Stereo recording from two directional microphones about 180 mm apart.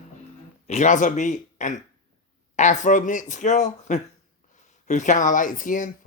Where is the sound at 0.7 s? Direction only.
40° left (ahead or behind).